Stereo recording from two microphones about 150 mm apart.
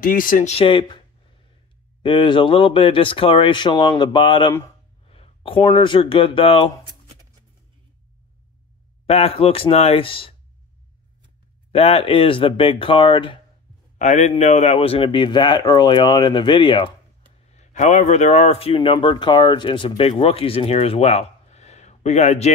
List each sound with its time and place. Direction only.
0.0 s speech: 70° left (ahead or behind)
0.5 s speech: 40° left (ahead or behind)
2.0 s speech: 35° left (ahead or behind)
5.0 s a sound: 40° left (ahead or behind)
5.7 s speech: 30° left (ahead or behind)
9.0 s speech: 40° left (ahead or behind)
11.7 s speech: 40° left (ahead or behind)
13.9 s a man's voice: 50° left (ahead or behind); by 16.9 s 30° left (ahead or behind)
17.5 s speech: 50° left (ahead or behind)